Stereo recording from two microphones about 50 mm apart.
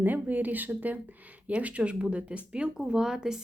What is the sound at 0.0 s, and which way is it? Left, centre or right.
Speech, right.